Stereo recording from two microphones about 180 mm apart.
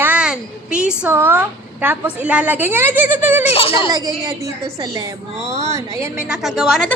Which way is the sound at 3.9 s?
20° right (ahead or behind).